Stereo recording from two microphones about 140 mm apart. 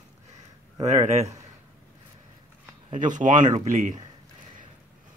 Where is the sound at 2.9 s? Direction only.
65° right (ahead or behind).